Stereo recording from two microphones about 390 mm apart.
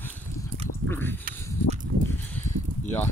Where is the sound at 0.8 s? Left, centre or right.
Centre.